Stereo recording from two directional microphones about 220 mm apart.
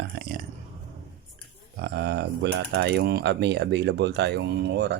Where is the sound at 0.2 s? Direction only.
40° right (ahead or behind).